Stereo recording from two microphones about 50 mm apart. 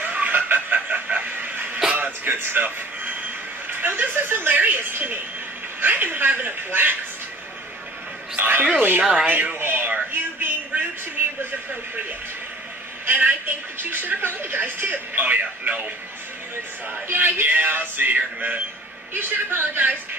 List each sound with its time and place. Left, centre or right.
0.0 s a sound: right
0.7 s chicken: right
1.2 s a sound: right
2.0 s music: right
3.6 s a woman's voice: right
8.4 s a woman's voice: right
9.3 s a sound: right
13.0 s a woman's voice: right
17.1 s a woman's voice: right
19.1 s speech: right